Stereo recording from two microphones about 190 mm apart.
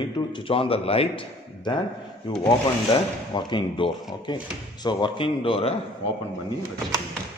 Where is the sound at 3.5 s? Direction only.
25° left (ahead or behind).